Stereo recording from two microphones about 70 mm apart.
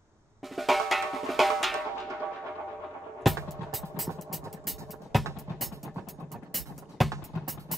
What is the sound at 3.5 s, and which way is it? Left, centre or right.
Music, centre.